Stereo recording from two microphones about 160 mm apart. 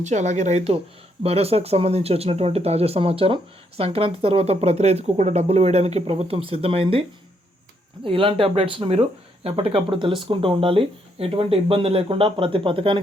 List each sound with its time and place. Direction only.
0.0 s speech: 50° right (ahead or behind)
8.0 s speech: 35° right (ahead or behind)